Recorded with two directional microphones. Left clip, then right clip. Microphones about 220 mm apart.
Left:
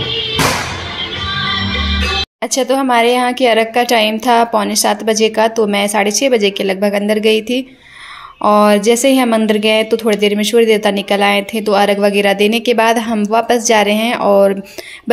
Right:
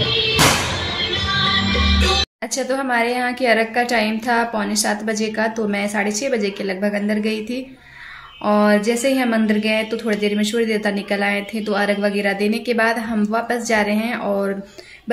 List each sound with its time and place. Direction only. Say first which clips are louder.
1.4 s music: left 2 dB; 45° right (ahead or behind)
2.4 s a woman's voice: left 8 dB; 30° left (ahead or behind)